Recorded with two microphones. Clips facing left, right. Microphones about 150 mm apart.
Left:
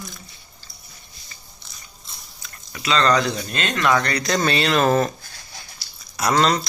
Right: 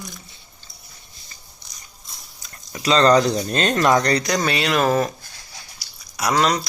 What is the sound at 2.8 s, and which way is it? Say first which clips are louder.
Speech: right 4 dB; 35° right (ahead or behind).